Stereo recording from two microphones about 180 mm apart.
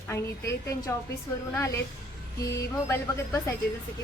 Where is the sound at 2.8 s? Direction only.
15° left (ahead or behind).